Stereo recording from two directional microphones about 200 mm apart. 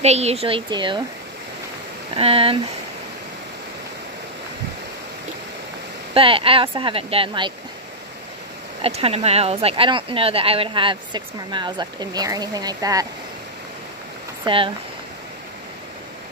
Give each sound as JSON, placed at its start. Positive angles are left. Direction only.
{"t": 0.0, "sound": "speech", "side_deg": -30}
{"t": 2.1, "sound": "speech", "side_deg": -30}
{"t": 6.1, "sound": "speech", "side_deg": -25}
{"t": 8.8, "sound": "speech", "side_deg": -30}
{"t": 14.4, "sound": "speech", "side_deg": -25}